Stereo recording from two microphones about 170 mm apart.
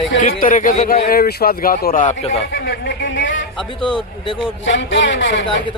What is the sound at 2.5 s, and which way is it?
Speech, 75° left (ahead or behind).